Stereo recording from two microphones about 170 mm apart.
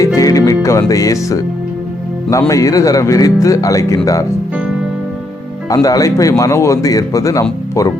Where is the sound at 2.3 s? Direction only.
20° left (ahead or behind).